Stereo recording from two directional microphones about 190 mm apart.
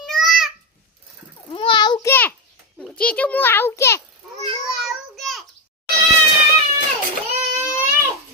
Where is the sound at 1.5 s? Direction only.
25° left (ahead or behind).